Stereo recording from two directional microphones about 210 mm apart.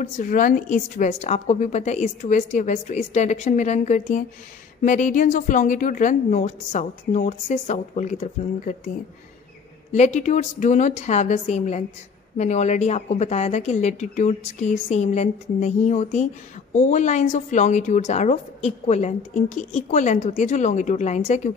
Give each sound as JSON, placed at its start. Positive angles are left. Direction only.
{"t": 0.0, "sound": "a woman's voice", "side_deg": 40}
{"t": 9.9, "sound": "a woman's voice", "side_deg": 35}